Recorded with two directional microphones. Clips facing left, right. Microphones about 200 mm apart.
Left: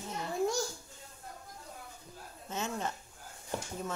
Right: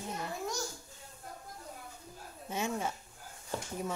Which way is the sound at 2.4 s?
10° right (ahead or behind).